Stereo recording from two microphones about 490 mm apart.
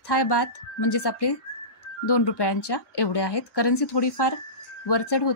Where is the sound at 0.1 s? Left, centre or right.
Left.